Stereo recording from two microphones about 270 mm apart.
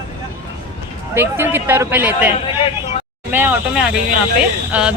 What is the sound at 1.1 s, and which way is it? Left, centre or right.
Speech, centre.